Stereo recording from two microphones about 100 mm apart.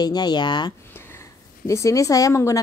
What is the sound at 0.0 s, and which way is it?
Speech, 45° left (ahead or behind).